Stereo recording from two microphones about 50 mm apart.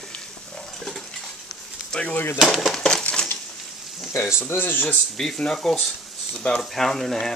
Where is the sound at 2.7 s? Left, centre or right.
Centre.